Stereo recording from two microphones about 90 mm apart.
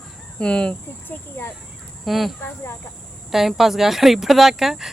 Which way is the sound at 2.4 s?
25° left (ahead or behind).